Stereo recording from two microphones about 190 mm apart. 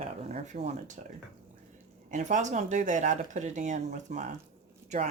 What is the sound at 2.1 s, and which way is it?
Speech, 40° right (ahead or behind).